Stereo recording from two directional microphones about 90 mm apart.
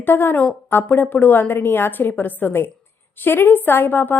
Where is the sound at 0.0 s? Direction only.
25° left (ahead or behind).